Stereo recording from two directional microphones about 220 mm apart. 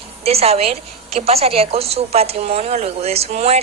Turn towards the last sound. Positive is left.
turn(degrees=-30)  # may be behind; listen again after turning